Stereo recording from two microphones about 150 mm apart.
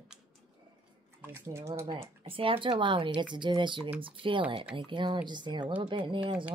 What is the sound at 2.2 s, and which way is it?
Speech, 35° right (ahead or behind).